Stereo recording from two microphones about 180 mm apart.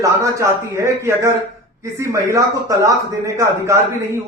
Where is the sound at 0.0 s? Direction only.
15° right (ahead or behind).